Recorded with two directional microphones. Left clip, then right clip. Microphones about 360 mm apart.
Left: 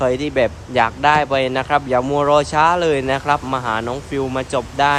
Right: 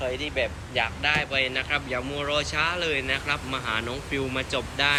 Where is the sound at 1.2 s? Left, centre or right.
Centre.